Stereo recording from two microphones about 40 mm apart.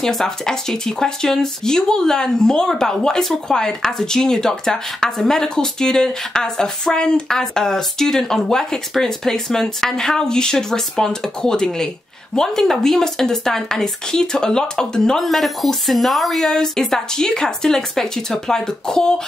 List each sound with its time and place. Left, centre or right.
0.0 s speech: centre
15.2 s speech: centre
16.3 s speech: centre